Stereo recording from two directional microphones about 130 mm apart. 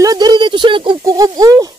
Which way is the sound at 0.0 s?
30° right (ahead or behind).